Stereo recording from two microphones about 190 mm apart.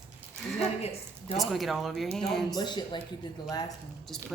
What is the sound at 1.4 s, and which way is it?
Speech, centre (ahead or behind).